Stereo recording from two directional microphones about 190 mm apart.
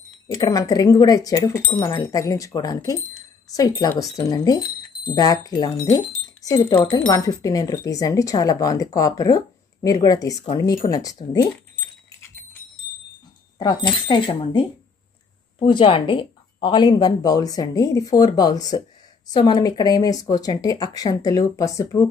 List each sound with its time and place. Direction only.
0.3 s speech: 20° left (ahead or behind)
13.6 s speech: 25° left (ahead or behind)